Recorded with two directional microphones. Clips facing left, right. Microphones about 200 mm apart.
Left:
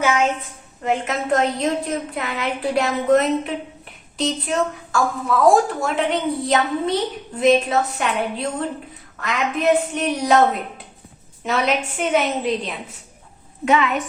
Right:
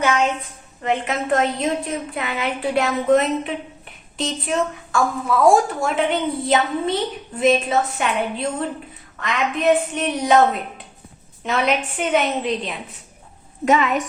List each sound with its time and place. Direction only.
0.0 s a woman's voice: 5° left (ahead or behind)
11.4 s a woman's voice: centre (ahead or behind)
13.7 s a woman's voice: 40° right (ahead or behind)